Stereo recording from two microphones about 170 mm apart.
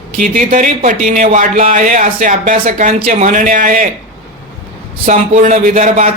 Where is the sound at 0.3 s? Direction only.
50° right (ahead or behind).